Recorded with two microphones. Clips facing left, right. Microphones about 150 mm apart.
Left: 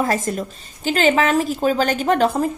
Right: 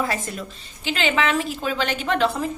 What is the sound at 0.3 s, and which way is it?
A woman's voice, 45° left (ahead or behind).